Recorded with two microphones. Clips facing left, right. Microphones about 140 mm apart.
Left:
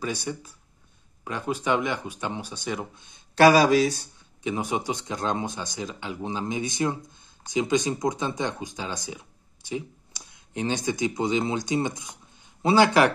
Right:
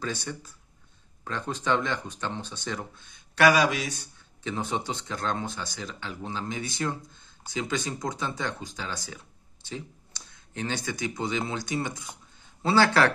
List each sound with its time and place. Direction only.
0.0 s speech: 15° left (ahead or behind)
3.3 s speech: 30° left (ahead or behind)
4.4 s speech: 15° left (ahead or behind)